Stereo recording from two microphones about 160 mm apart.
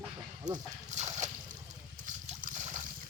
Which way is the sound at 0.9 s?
45° right (ahead or behind).